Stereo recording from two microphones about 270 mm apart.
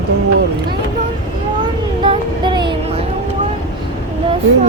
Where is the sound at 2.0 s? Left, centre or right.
Centre.